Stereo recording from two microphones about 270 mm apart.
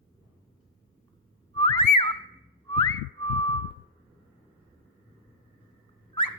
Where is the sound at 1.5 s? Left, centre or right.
Centre.